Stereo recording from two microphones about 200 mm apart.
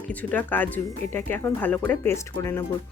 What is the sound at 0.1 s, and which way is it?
A woman's voice, 10° left (ahead or behind).